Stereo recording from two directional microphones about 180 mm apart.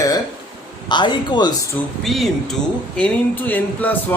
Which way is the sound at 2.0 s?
Centre (ahead or behind).